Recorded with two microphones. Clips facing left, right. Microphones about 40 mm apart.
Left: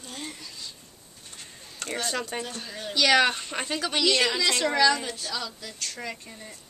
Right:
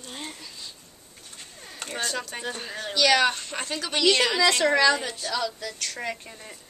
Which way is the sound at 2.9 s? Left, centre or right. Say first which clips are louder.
Even; centre.